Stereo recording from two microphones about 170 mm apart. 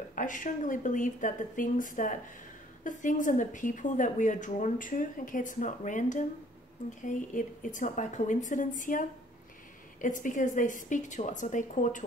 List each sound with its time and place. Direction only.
0.1 s a woman's voice: 50° left (ahead or behind)
10.0 s a woman's voice: 50° left (ahead or behind)